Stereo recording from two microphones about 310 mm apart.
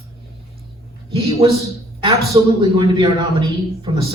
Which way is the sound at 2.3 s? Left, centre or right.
Centre.